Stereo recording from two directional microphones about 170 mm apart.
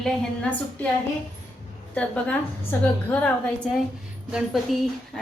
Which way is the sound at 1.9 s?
5° left (ahead or behind).